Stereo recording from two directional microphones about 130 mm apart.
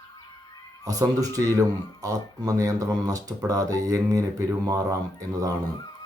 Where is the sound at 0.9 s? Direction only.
25° right (ahead or behind).